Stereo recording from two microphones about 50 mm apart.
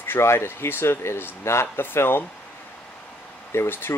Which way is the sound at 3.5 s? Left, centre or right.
Left.